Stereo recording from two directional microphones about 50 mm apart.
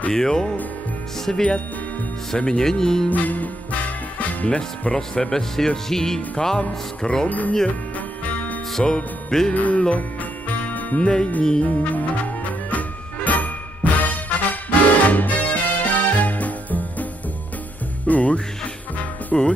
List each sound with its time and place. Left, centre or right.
0.1 s speech: centre
3.1 s music: left
4.5 s speech: centre
7.2 s speech: left
8.7 s music: centre
9.5 s music: left
11.0 s speech: centre
11.6 s music: left
18.0 s jingle bell: left
19.3 s speech: centre